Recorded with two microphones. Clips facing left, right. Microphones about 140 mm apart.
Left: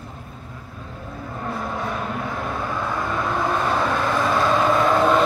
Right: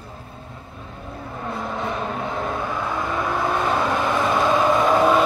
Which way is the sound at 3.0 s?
15° right (ahead or behind).